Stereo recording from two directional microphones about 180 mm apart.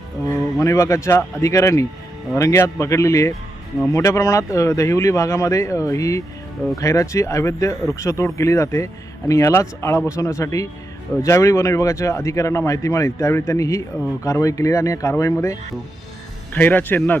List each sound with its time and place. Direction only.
0.6 s speech: 15° left (ahead or behind)